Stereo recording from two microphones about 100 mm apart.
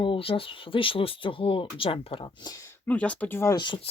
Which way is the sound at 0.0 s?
60° left (ahead or behind).